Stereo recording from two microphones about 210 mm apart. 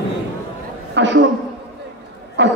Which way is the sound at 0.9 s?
60° right (ahead or behind).